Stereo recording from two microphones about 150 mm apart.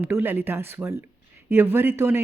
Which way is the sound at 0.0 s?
15° right (ahead or behind).